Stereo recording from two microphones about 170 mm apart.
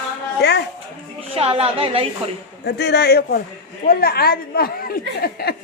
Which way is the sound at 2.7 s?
75° left (ahead or behind).